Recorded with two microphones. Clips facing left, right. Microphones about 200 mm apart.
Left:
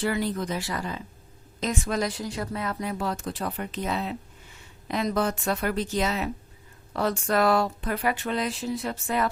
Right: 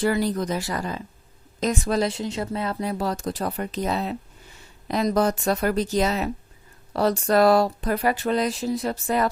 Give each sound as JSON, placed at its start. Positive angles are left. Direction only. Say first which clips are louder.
{"t": 0.0, "sound": "a woman's voice", "louder": "right 4 dB", "side_deg": -40}